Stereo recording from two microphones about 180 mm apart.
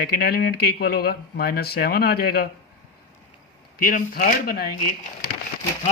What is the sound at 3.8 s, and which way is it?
Speech, 50° left (ahead or behind).